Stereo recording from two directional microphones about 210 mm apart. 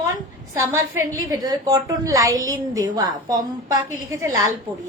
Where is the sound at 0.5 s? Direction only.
15° right (ahead or behind).